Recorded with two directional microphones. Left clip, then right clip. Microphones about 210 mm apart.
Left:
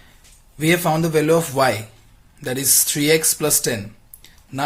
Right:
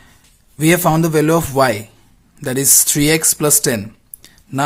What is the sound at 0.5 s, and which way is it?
Speech, 35° right (ahead or behind).